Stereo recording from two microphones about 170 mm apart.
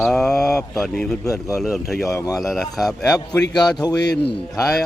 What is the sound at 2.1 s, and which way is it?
Speech, 20° left (ahead or behind).